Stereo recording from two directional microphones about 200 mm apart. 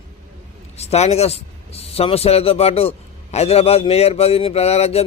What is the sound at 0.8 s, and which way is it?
A man's voice, 30° left (ahead or behind).